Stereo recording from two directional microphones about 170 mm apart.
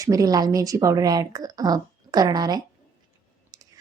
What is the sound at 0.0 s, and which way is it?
Speech, 20° right (ahead or behind).